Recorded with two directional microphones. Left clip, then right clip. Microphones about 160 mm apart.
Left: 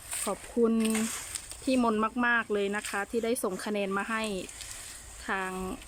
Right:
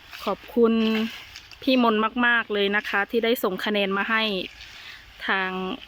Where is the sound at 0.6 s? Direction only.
5° left (ahead or behind).